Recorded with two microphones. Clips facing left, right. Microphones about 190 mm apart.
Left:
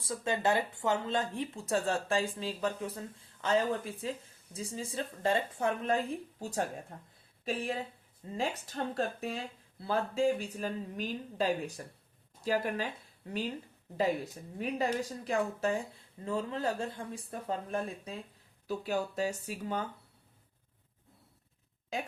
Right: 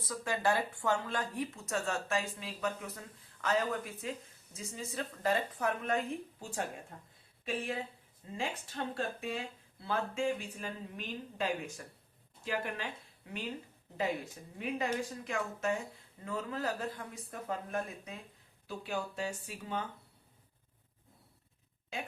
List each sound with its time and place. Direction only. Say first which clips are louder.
0.0 s speech: left 2 dB; 25° left (ahead or behind)
14.6 s speech: left 3 dB; 35° left (ahead or behind)